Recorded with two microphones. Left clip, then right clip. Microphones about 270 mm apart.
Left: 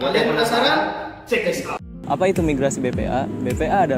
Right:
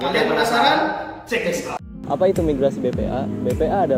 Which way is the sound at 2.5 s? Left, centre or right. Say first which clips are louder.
Right 1 dB; left.